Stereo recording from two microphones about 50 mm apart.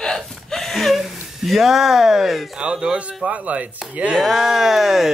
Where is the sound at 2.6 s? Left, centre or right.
Centre.